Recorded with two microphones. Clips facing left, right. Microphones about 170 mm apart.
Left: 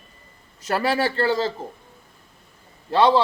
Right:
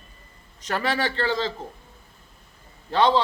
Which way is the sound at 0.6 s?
10° left (ahead or behind).